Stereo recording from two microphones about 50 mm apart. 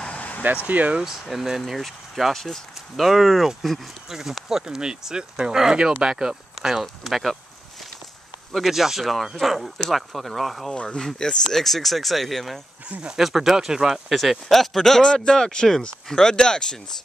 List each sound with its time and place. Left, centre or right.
0.0 s a sound: left
0.7 s speech: right
1.3 s speech: centre
8.5 s speech: centre
10.7 s speech: centre
11.4 s speech: centre
12.8 s speech: right
13.1 s speech: centre